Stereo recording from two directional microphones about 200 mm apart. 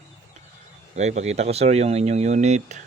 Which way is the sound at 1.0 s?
35° right (ahead or behind).